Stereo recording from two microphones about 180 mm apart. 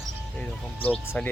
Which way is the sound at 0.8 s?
10° left (ahead or behind).